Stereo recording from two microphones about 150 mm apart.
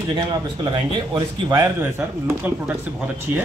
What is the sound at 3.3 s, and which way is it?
Speech, 15° right (ahead or behind).